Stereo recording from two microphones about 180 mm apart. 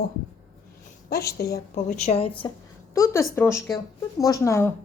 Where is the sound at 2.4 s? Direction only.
20° left (ahead or behind).